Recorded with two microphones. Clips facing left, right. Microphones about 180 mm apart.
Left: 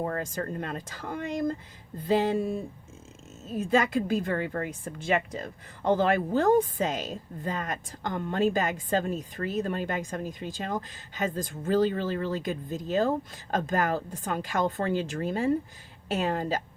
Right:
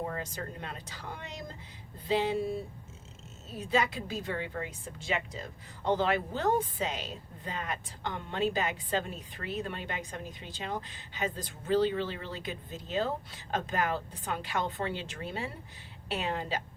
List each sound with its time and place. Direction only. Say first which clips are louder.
0.0 s a woman's voice: left 6 dB; 50° left (ahead or behind)